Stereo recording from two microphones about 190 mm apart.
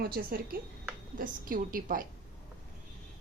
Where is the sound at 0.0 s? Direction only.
50° right (ahead or behind).